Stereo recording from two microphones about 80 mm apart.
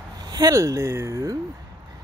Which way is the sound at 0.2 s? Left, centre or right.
Right.